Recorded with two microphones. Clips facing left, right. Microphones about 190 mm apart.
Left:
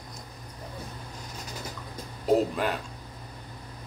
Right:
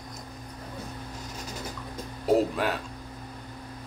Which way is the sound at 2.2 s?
Centre (ahead or behind).